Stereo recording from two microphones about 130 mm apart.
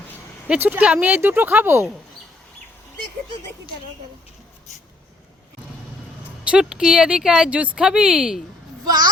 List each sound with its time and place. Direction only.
0.4 s speech: 10° right (ahead or behind)
6.2 s speech: 10° right (ahead or behind)
8.8 s a child's voice: 30° right (ahead or behind)